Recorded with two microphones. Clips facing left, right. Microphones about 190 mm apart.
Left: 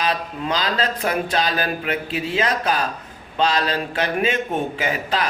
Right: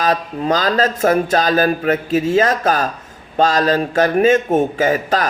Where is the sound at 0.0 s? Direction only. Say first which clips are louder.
Right 6 dB; 45° right (ahead or behind).